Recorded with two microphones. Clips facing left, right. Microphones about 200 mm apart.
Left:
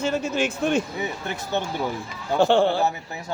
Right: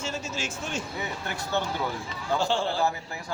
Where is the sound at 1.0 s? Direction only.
20° left (ahead or behind).